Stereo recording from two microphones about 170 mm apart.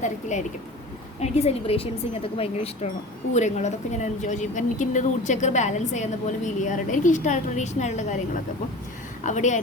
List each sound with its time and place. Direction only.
0.0 s a woman's voice: 45° left (ahead or behind)